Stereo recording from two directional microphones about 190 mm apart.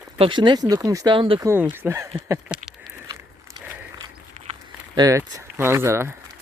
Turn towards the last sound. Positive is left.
turn(degrees=-15)  # may be behind; listen again after turning